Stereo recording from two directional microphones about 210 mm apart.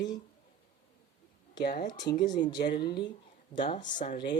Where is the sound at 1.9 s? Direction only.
20° left (ahead or behind).